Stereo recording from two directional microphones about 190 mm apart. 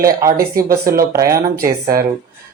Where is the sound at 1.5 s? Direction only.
50° right (ahead or behind).